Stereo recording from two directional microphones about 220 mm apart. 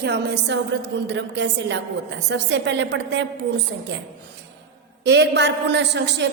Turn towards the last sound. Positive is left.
turn(degrees=-50)  # may be behind; listen again after turning